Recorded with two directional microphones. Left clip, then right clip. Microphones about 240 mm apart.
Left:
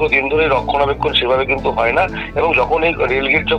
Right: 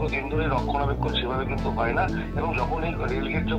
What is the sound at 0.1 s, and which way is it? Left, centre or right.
Speech, left.